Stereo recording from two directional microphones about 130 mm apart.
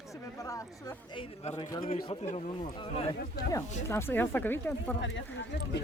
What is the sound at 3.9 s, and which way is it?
Speech, 20° left (ahead or behind).